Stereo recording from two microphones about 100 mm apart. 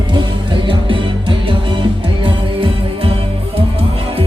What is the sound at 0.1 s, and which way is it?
Music, 55° right (ahead or behind).